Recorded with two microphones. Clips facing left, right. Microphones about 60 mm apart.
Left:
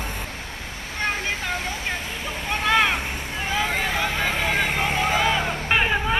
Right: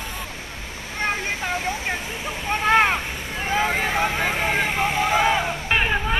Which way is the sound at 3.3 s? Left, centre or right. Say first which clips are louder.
Right 3 dB; right.